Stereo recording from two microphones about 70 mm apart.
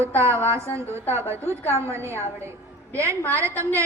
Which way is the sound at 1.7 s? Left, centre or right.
Right.